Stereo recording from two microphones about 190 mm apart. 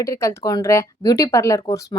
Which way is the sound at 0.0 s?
15° left (ahead or behind).